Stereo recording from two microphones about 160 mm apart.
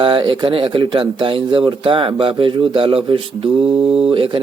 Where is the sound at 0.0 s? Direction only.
35° right (ahead or behind).